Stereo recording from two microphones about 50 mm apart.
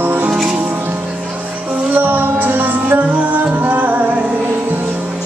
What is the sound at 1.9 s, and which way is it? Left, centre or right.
Music, right.